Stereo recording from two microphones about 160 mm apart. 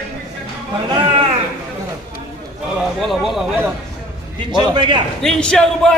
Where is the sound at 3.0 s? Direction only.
Centre (ahead or behind).